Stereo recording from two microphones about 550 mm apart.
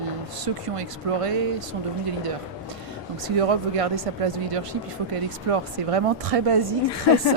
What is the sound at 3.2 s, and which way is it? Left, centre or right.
Speech, right.